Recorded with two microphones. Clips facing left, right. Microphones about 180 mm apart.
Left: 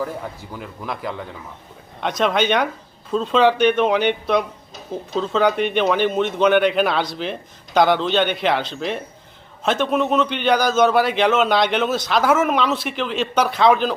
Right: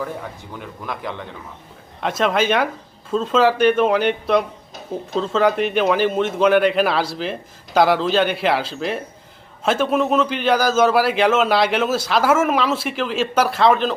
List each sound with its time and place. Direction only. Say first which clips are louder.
0.5 s speech: right 1 dB; centre (ahead or behind)